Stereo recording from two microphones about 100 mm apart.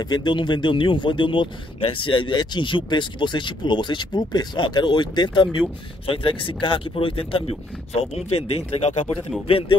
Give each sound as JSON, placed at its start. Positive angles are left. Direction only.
{"t": 0.0, "sound": "speech", "side_deg": 45}
{"t": 6.0, "sound": "speech", "side_deg": 65}
{"t": 9.5, "sound": "speech", "side_deg": 70}